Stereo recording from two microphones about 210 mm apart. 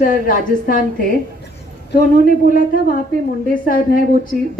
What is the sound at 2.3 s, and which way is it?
A woman's voice, 40° left (ahead or behind).